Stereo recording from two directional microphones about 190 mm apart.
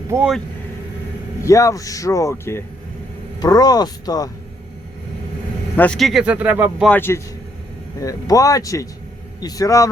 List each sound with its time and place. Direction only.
0.1 s speech: 15° right (ahead or behind)
1.5 s speech: 15° left (ahead or behind)
5.7 s speech: 5° left (ahead or behind)
6.9 s speech: 10° left (ahead or behind)